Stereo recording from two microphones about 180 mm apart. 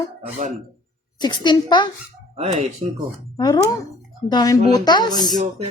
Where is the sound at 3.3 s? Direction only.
20° left (ahead or behind).